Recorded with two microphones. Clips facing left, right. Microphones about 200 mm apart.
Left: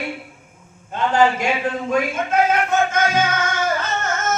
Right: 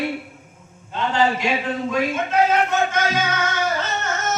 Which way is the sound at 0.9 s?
50° left (ahead or behind).